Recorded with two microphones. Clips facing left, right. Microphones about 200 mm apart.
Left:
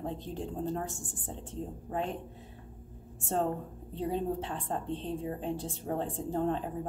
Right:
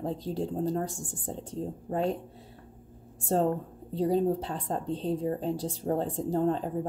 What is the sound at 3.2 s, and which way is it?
A woman's voice, 35° right (ahead or behind).